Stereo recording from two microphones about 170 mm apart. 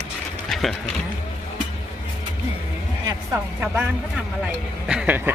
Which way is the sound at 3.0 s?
20° right (ahead or behind).